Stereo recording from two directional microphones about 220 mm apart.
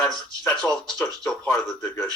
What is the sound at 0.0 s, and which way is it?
Speech, 15° left (ahead or behind).